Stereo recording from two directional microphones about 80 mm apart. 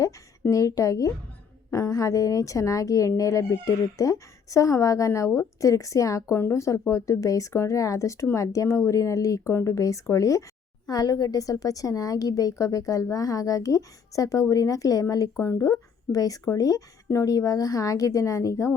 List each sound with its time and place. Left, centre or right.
0.5 s speech: left
15.4 s speech: left
15.6 s speech: left